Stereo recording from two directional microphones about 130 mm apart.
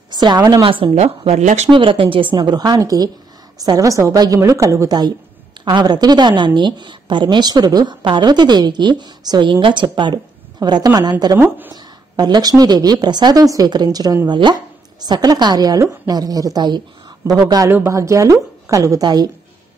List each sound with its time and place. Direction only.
0.1 s a woman's voice: 35° right (ahead or behind)
0.9 s speech: 55° right (ahead or behind)
1.7 s a woman's voice: 40° right (ahead or behind)
11.3 s speech: 15° right (ahead or behind)
11.7 s a woman's voice: 30° right (ahead or behind)
17.6 s a woman's voice: 20° right (ahead or behind)